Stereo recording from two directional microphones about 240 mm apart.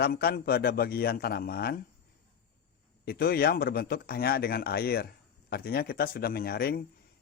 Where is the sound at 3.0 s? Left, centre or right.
Left.